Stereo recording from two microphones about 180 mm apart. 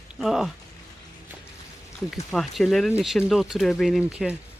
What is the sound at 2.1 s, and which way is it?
Speech, centre (ahead or behind).